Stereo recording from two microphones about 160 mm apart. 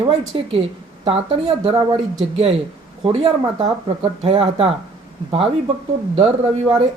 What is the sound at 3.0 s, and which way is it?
Speech, 35° right (ahead or behind).